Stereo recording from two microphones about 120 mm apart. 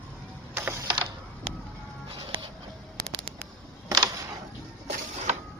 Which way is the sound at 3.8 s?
35° right (ahead or behind).